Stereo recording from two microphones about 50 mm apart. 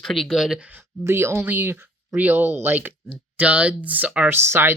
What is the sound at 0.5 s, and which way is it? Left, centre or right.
Speech, right.